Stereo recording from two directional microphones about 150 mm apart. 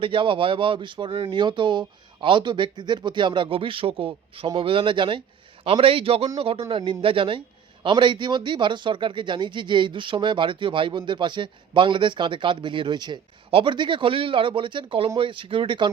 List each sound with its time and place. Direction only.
0.0 s speech: 35° right (ahead or behind)